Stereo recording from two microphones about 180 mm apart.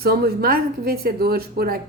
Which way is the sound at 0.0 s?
60° right (ahead or behind).